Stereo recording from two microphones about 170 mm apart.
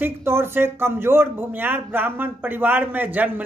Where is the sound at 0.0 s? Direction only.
15° right (ahead or behind).